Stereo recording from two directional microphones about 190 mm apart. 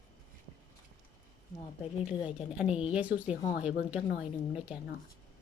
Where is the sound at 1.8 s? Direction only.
25° left (ahead or behind).